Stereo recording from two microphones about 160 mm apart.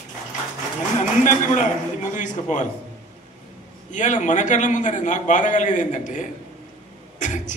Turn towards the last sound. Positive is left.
turn(degrees=50)  # may be behind; listen again after turning